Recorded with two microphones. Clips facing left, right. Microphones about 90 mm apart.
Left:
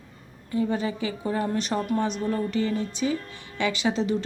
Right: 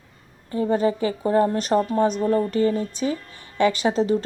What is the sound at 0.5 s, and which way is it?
Speech, 40° right (ahead or behind).